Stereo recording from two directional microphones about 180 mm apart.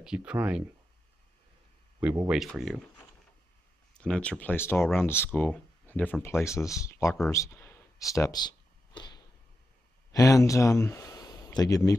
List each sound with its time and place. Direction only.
0.0 s speech: 5° right (ahead or behind)
2.0 s speech: 10° right (ahead or behind)
4.0 s speech: 5° left (ahead or behind)
7.2 s a sound: 15° left (ahead or behind)
10.1 s speech: 20° left (ahead or behind)